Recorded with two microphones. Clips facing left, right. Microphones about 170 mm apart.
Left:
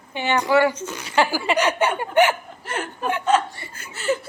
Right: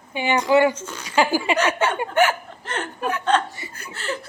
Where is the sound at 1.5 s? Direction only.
15° left (ahead or behind).